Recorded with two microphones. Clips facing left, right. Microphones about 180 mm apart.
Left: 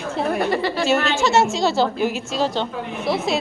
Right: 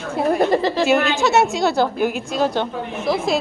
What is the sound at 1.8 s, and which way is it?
Speech, 55° right (ahead or behind).